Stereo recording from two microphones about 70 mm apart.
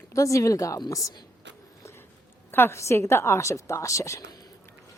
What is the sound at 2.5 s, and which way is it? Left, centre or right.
A woman's voice, left.